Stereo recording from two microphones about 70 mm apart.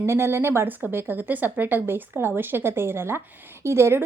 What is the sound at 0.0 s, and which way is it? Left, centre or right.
A woman's voice, right.